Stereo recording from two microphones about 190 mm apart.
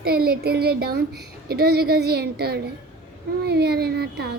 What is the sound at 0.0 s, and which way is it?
A woman's voice, 55° right (ahead or behind).